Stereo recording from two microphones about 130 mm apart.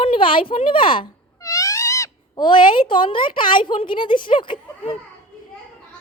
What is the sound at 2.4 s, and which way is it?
A woman's voice, 40° left (ahead or behind).